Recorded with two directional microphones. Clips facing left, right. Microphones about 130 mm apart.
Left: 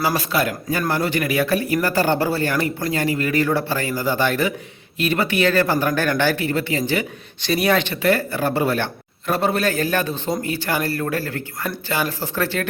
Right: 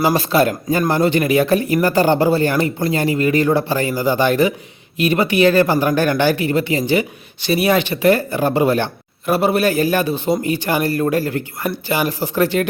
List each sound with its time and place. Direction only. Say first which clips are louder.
0.0 s speech: right 6 dB; 25° right (ahead or behind)